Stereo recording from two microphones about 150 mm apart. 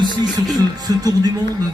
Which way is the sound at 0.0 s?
25° right (ahead or behind).